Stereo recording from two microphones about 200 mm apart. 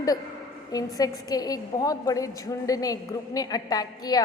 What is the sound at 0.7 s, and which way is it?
A woman's voice, 20° left (ahead or behind).